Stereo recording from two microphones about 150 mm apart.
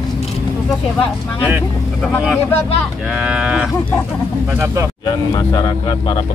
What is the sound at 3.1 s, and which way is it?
Cattle, 5° right (ahead or behind).